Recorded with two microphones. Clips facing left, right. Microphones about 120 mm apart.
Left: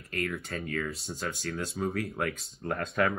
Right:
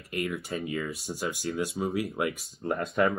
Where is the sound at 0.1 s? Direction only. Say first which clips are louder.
Right 2 dB; 10° right (ahead or behind).